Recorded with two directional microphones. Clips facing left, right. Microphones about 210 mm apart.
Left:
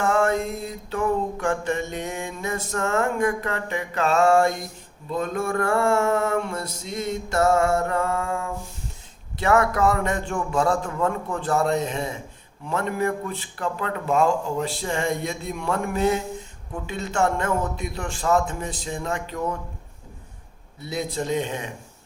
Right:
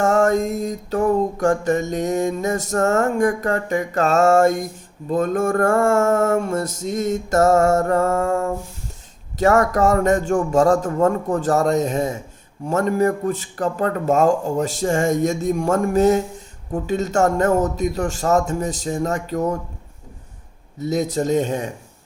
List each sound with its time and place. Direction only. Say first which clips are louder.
0.0 s music: right 5 dB; 45° right (ahead or behind)
20.7 s music: right 7 dB; 45° right (ahead or behind)